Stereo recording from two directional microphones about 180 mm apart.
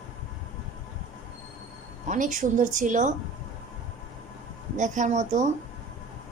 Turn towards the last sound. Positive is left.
turn(degrees=-40)  # may be behind; listen again after turning